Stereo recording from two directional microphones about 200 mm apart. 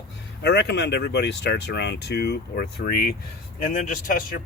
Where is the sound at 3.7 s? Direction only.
40° left (ahead or behind).